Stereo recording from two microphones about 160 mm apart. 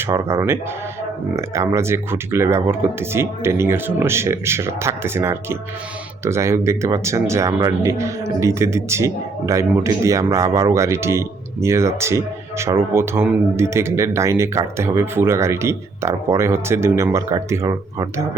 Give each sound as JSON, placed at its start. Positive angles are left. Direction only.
{"t": 0.0, "sound": "speech", "side_deg": -15}